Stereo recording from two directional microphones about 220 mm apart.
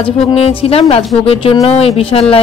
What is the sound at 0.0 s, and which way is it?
Speech, 25° left (ahead or behind).